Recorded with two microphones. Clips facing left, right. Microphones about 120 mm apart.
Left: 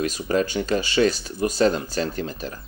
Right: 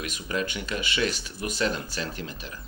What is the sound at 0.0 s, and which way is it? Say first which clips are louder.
Speech: left 8 dB; 35° left (ahead or behind).